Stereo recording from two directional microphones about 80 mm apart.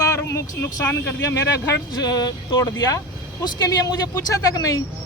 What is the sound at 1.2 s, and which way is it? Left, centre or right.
Speech, left.